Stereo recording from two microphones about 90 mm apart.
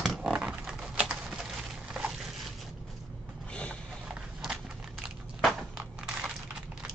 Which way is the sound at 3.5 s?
15° left (ahead or behind).